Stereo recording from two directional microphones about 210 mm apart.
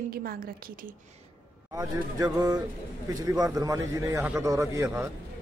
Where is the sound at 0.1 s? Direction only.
45° right (ahead or behind).